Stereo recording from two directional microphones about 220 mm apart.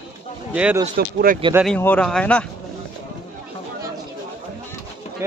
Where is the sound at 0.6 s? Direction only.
5° right (ahead or behind).